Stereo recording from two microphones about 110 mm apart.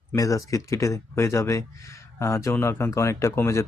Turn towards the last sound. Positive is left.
turn(degrees=25)  # may be behind; listen again after turning